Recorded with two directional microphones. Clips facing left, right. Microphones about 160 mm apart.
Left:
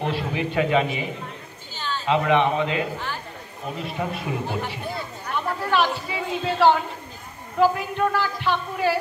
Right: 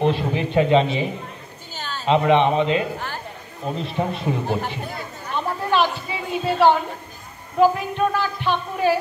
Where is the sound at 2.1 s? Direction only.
20° right (ahead or behind).